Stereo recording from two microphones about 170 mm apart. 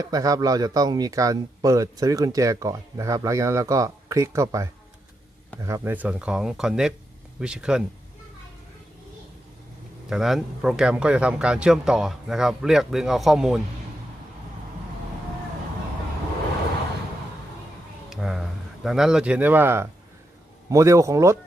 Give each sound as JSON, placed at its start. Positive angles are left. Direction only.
{"t": 0.0, "sound": "a man's voice", "side_deg": -20}
{"t": 10.1, "sound": "speech", "side_deg": 0}
{"t": 18.1, "sound": "a sound", "side_deg": -5}
{"t": 20.7, "sound": "speech", "side_deg": -20}